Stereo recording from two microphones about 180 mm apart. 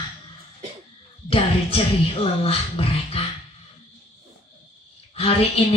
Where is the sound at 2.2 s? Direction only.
30° left (ahead or behind).